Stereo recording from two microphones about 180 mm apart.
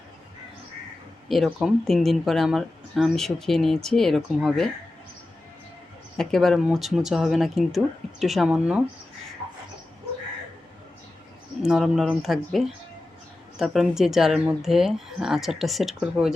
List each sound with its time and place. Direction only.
1.3 s speech: centre (ahead or behind)
6.1 s speech: centre (ahead or behind)
11.6 s speech: centre (ahead or behind)